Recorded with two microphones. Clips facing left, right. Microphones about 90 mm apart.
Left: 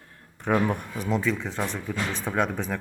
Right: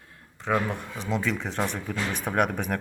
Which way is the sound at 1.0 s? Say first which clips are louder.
Left 1 dB; centre (ahead or behind).